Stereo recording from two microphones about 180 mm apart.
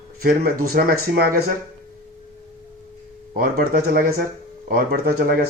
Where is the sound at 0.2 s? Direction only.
55° right (ahead or behind).